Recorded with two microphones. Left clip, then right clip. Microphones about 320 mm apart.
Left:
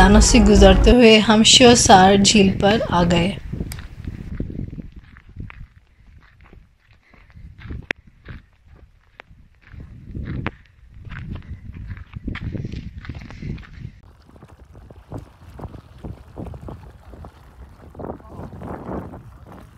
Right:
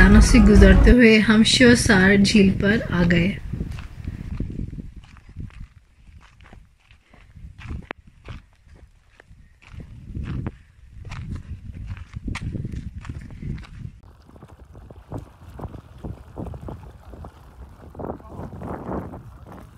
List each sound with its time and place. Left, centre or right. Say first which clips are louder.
0.0 s speech: left 3 dB; centre
11.9 s horse: left 1 dB; centre
14.5 s boat: even; centre